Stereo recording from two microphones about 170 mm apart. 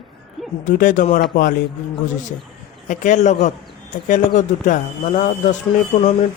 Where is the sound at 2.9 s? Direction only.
45° left (ahead or behind).